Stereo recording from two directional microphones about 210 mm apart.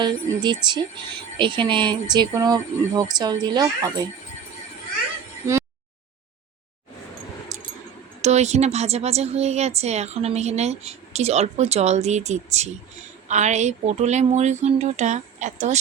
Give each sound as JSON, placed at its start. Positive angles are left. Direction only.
{"t": 0.0, "sound": "speech", "side_deg": -20}
{"t": 8.2, "sound": "a woman's voice", "side_deg": -30}